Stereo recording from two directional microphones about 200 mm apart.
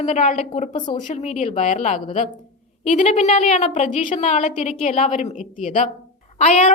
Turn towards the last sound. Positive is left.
turn(degrees=35)  # may be behind; listen again after turning